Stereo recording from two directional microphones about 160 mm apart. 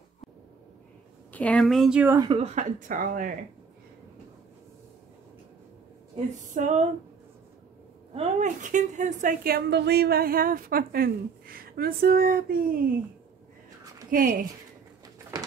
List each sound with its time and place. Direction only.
1.3 s speech: 10° left (ahead or behind)
2.1 s speech: 30° right (ahead or behind)
2.4 s a woman's voice: 50° right (ahead or behind)
6.1 s female singing: 50° right (ahead or behind)
8.1 s a woman's voice: 45° right (ahead or behind); by 12.8 s 65° right (ahead or behind)
14.1 s a woman's voice: 60° right (ahead or behind)